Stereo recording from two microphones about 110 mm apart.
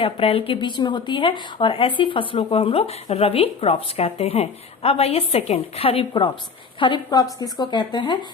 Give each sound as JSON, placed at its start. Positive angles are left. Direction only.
{"t": 0.0, "sound": "a woman's voice", "side_deg": 60}
{"t": 7.1, "sound": "a woman's voice", "side_deg": 35}